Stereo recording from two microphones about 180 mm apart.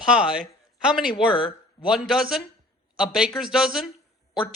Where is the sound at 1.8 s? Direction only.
Centre (ahead or behind).